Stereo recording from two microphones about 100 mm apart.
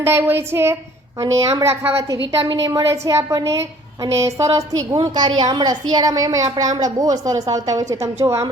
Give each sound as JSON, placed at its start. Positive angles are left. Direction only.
{"t": 0.0, "sound": "speech", "side_deg": -25}
{"t": 1.2, "sound": "a woman's voice", "side_deg": -35}
{"t": 2.5, "sound": "a woman's voice", "side_deg": -40}